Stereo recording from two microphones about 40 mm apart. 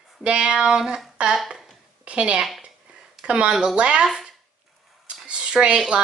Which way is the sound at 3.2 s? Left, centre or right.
Right.